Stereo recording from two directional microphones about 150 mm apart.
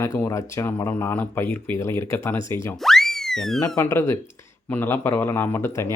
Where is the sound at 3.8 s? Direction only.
15° left (ahead or behind).